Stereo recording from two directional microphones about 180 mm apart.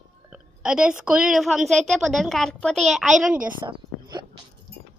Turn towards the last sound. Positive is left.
turn(degrees=-25)  # may be behind; listen again after turning